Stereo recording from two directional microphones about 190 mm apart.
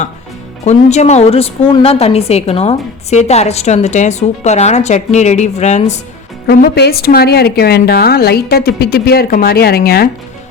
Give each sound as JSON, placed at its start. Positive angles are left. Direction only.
{"t": 0.6, "sound": "a woman's voice", "side_deg": 35}
{"t": 6.5, "sound": "a woman's voice", "side_deg": 60}